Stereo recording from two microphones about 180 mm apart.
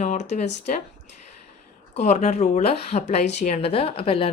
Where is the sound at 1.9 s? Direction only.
40° left (ahead or behind).